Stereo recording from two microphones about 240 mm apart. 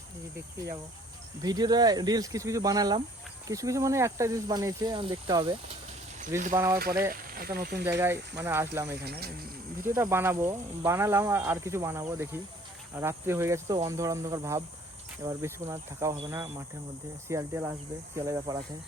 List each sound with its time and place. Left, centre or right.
1.4 s speech: centre
6.7 s speech: right
7.9 s speech: centre